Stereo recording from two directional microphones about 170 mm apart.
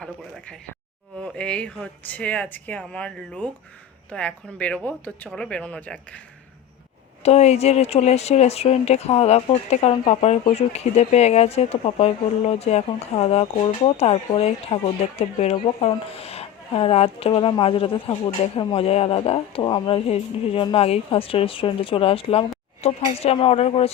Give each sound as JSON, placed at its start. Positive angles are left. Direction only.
{"t": 0.0, "sound": "speech", "side_deg": 5}
{"t": 7.2, "sound": "speech", "side_deg": 40}